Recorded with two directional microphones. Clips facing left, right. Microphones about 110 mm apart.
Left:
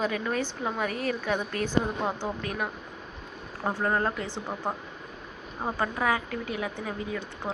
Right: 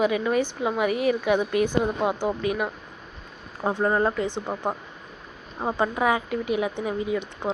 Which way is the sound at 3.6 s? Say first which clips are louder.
Right 5 dB; 15° right (ahead or behind).